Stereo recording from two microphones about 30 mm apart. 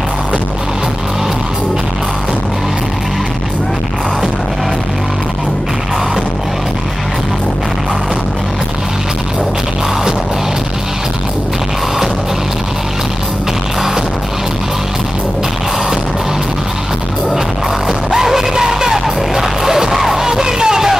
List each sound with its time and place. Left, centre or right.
17.8 s music: centre